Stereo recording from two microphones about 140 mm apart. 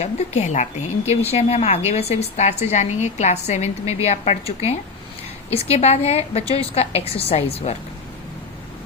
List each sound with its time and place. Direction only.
0.0 s a woman's voice: 50° left (ahead or behind)